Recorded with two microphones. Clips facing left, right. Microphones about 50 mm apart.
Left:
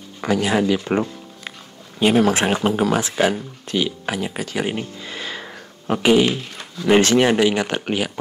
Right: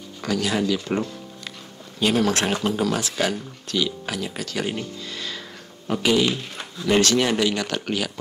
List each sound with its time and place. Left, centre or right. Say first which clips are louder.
0.2 s speech: left 5 dB; left